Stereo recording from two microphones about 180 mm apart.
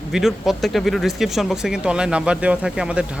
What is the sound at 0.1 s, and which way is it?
Speech, centre (ahead or behind).